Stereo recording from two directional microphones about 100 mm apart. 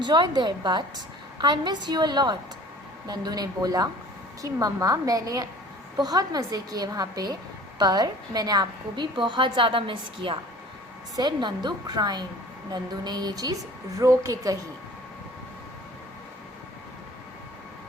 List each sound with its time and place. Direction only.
0.0 s a woman's voice: 50° right (ahead or behind)
11.2 s a woman's voice: 50° right (ahead or behind)